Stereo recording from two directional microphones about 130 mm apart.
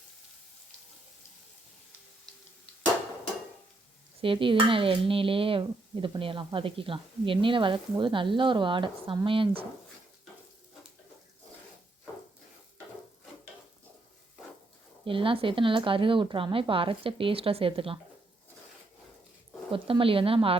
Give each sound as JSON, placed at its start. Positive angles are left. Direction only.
{"t": 4.2, "sound": "dishes", "side_deg": -40}
{"t": 9.2, "sound": "speech", "side_deg": -40}
{"t": 15.0, "sound": "speech", "side_deg": -40}
{"t": 19.7, "sound": "speech", "side_deg": -45}